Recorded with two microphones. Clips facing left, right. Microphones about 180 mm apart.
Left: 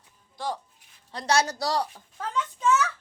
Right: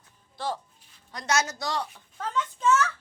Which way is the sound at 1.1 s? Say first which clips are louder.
Left 3 dB; 30° left (ahead or behind).